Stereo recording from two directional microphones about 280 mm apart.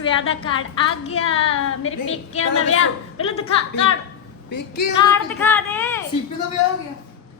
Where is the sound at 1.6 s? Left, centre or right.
Left.